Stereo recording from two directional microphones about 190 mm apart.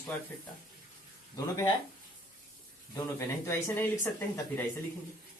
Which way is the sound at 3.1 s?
15° left (ahead or behind).